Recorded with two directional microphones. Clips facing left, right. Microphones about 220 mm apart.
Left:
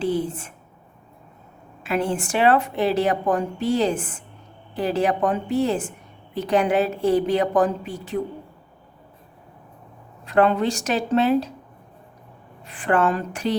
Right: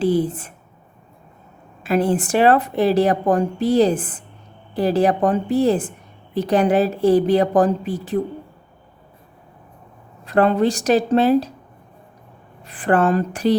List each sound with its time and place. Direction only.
0.0 s a woman's voice: 35° right (ahead or behind)
1.8 s a woman's voice: 35° right (ahead or behind)
10.2 s a woman's voice: 35° right (ahead or behind)
12.6 s a woman's voice: 35° right (ahead or behind)